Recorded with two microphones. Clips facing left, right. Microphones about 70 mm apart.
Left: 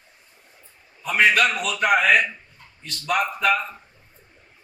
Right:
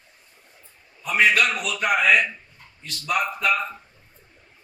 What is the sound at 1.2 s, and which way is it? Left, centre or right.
Speech, centre.